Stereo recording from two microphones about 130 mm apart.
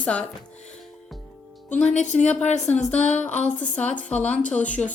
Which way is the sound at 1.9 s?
65° left (ahead or behind).